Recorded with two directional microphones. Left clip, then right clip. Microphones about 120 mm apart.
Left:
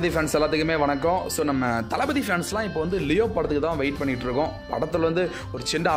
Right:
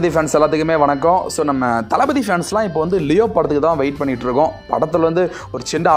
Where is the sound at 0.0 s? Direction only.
25° right (ahead or behind).